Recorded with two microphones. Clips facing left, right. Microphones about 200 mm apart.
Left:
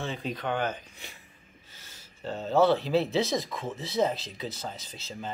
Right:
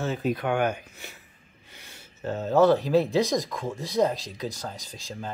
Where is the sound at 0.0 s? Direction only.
5° right (ahead or behind).